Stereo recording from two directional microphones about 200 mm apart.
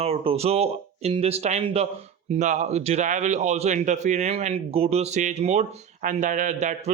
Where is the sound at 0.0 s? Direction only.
30° right (ahead or behind).